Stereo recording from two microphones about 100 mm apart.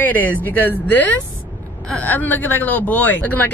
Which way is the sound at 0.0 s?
15° left (ahead or behind).